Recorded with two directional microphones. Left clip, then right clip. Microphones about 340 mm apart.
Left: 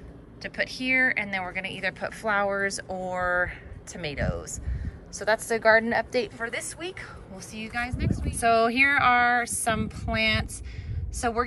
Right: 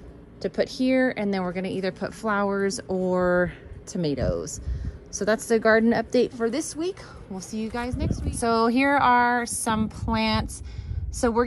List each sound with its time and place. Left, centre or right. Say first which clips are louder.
0.4 s a woman's voice: right 5 dB; centre
3.9 s a woman's voice: right 5 dB; centre